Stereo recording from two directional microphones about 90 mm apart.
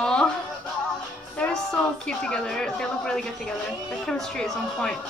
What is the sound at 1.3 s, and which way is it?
A woman's voice, 10° left (ahead or behind).